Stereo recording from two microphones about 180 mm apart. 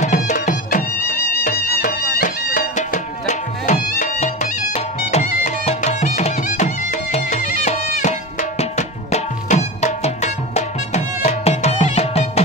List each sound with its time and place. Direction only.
0.0 s music: 45° left (ahead or behind)